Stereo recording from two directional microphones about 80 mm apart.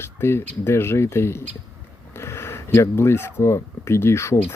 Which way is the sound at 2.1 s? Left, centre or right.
Left.